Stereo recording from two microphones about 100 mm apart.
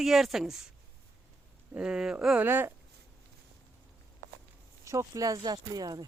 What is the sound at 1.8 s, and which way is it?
Speech, 5° right (ahead or behind).